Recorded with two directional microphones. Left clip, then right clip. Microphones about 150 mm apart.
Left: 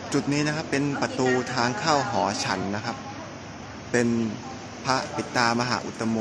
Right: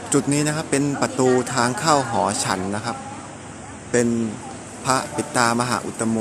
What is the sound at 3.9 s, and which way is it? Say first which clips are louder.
A man's voice: right 4 dB; 10° right (ahead or behind).